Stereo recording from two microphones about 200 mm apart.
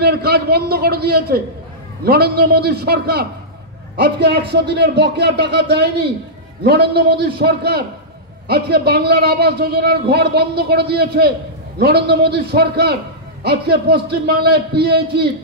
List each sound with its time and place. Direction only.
0.0 s a man's voice: 50° right (ahead or behind)